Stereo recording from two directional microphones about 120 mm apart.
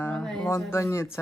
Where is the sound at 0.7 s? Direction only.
20° left (ahead or behind).